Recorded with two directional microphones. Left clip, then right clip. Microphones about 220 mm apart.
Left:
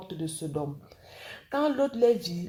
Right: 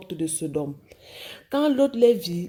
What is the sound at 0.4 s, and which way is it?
A woman's voice, 45° right (ahead or behind).